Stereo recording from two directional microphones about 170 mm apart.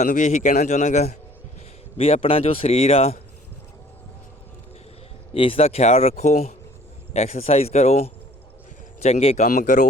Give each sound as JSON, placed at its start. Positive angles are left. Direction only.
{"t": 0.0, "sound": "a man's voice", "side_deg": 45}
{"t": 5.3, "sound": "speech", "side_deg": 35}